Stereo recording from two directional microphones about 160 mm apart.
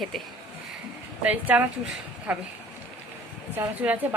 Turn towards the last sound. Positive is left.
turn(degrees=-10)  # may be behind; listen again after turning